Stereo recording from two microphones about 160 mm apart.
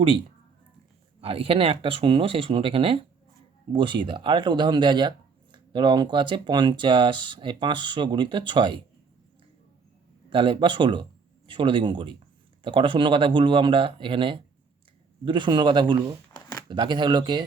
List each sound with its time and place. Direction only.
1.2 s speech: 35° right (ahead or behind)
10.2 s speech: 30° right (ahead or behind)